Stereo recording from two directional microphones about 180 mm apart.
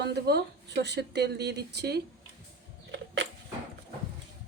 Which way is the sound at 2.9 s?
80° right.